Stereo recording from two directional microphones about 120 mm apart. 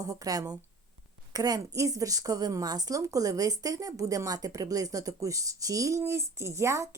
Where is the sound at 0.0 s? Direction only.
30° right (ahead or behind).